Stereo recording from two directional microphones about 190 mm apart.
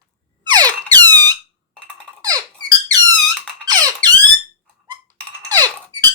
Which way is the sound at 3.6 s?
20° right (ahead or behind).